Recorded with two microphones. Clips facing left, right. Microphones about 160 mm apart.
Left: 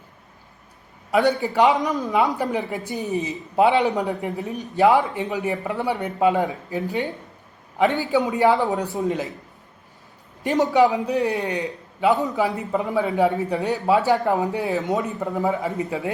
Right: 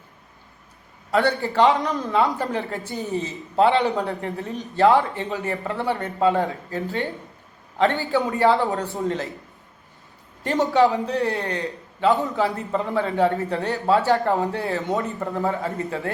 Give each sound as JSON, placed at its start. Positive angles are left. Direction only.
{"t": 1.1, "sound": "a man's voice", "side_deg": 15}
{"t": 10.4, "sound": "a man's voice", "side_deg": 15}